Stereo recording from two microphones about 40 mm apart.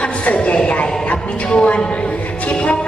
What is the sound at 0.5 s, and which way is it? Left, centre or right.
A woman's voice, left.